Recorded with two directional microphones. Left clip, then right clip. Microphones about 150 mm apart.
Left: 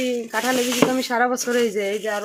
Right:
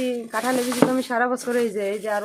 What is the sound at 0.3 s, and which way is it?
Speech, 5° left (ahead or behind).